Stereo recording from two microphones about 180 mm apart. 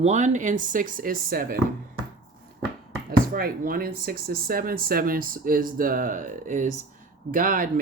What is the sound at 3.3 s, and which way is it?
Speech, 55° right (ahead or behind).